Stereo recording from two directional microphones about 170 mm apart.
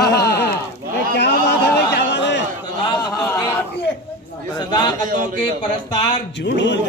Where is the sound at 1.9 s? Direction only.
85° left.